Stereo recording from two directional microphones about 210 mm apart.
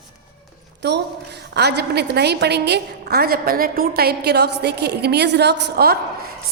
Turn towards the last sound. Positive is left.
turn(degrees=-45)  # may be behind; listen again after turning